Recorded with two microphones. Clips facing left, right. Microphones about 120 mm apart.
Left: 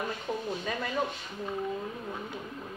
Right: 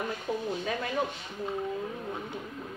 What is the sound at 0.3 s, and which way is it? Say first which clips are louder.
Speech: right 3 dB; 10° right (ahead or behind).